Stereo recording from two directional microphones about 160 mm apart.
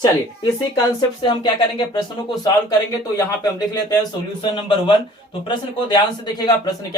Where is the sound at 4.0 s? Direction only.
30° left (ahead or behind).